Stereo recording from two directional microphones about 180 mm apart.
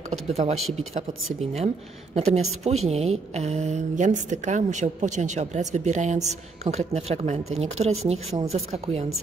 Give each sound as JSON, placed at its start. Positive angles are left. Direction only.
{"t": 0.1, "sound": "a woman's voice", "side_deg": -40}